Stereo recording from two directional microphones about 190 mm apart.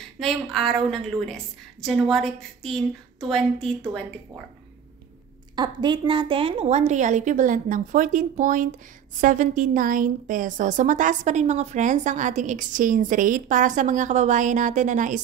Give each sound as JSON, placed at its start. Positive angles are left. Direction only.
{"t": 0.2, "sound": "a woman's voice", "side_deg": 0}
{"t": 5.6, "sound": "a woman's voice", "side_deg": -25}